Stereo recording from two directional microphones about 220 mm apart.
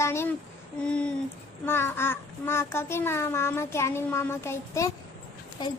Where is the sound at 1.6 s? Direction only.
10° left (ahead or behind).